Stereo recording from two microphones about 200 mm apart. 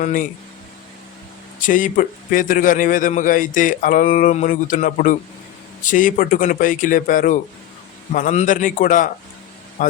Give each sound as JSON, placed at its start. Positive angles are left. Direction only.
{"t": 0.0, "sound": "a man's voice", "side_deg": 40}
{"t": 1.6, "sound": "a man's voice", "side_deg": 40}